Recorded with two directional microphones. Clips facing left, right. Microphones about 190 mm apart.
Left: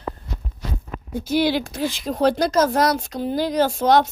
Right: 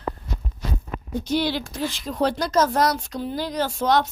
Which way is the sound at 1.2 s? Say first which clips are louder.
Left 5 dB; 10° left (ahead or behind).